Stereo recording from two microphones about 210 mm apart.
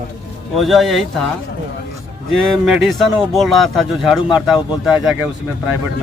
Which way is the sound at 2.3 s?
Centre (ahead or behind).